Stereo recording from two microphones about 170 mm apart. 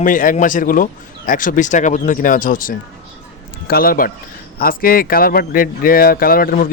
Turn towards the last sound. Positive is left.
turn(degrees=55)  # may be behind; listen again after turning